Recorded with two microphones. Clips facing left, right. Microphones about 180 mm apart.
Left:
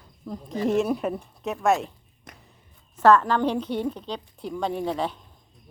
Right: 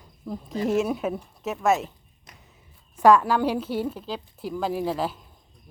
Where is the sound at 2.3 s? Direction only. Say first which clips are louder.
Left 4 dB; 55° left (ahead or behind).